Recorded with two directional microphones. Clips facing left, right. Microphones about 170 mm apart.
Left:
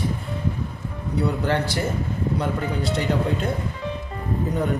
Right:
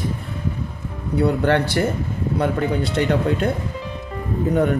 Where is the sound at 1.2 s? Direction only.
60° right (ahead or behind).